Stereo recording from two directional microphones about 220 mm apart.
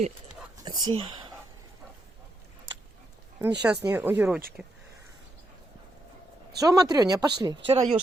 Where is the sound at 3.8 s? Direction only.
10° right (ahead or behind).